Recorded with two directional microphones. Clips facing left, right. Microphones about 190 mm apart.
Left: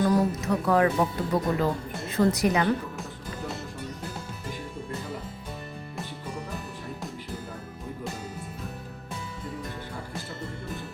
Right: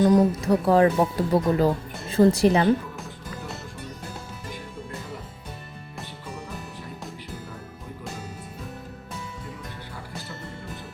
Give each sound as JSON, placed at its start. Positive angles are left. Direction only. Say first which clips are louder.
{"t": 0.0, "sound": "a woman's voice", "louder": "right 5 dB", "side_deg": -20}
{"t": 0.3, "sound": "a woman's voice", "louder": "right 4 dB", "side_deg": -30}